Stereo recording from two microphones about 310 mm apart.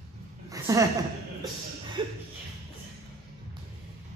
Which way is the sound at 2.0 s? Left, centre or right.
Centre.